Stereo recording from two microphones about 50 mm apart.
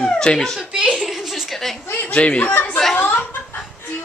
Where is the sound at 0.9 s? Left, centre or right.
Centre.